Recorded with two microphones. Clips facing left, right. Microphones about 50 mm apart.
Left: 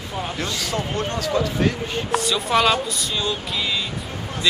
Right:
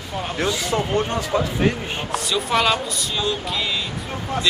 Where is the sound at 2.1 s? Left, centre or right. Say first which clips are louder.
Left 1 dB; centre.